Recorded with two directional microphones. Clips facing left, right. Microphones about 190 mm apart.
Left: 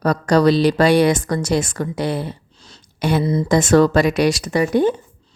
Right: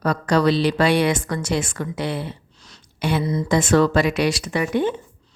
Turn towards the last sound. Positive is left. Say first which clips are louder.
# left 5 dB
turn(degrees=40)  # may be behind; listen again after turning